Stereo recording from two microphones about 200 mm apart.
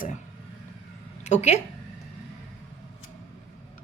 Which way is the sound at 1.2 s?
35° left (ahead or behind).